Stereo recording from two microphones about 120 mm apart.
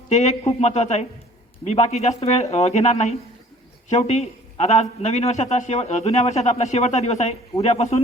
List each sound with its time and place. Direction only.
0.1 s a man's voice: 70° left (ahead or behind)